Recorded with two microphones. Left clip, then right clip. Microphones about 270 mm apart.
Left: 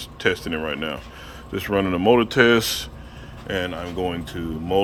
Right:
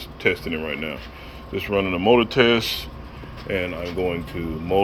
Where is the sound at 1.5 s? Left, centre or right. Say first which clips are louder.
Even; centre.